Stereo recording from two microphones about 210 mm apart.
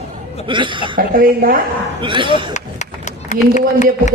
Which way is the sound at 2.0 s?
25° right (ahead or behind).